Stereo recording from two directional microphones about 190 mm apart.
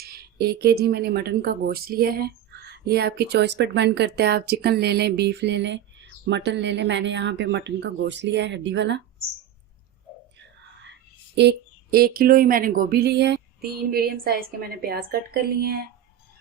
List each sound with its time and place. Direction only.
0.0 s speech: 55° right (ahead or behind)
11.3 s speech: 55° right (ahead or behind)